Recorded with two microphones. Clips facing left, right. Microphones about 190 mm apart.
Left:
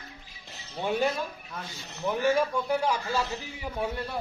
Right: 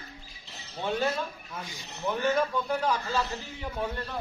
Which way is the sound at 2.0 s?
10° left (ahead or behind).